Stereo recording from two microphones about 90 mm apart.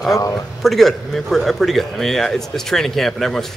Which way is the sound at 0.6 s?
Centre (ahead or behind).